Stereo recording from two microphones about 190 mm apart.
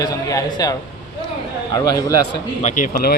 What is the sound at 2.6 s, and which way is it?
Speech, 45° left (ahead or behind).